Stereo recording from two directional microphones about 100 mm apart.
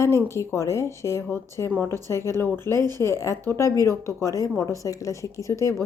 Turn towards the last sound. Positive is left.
turn(degrees=30)  # may be behind; listen again after turning